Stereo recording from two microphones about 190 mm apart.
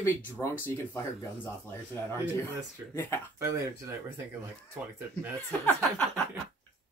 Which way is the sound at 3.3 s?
15° right (ahead or behind).